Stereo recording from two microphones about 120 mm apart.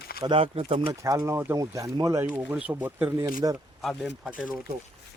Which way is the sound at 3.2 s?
30° right (ahead or behind).